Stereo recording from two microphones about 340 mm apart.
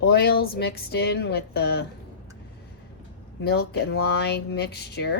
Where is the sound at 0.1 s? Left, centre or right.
Left.